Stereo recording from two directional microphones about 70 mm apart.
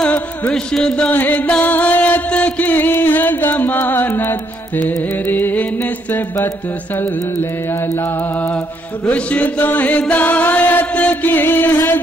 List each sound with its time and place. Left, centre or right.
0.5 s music: centre
1.1 s chant: left
1.6 s music: left
9.0 s chant: centre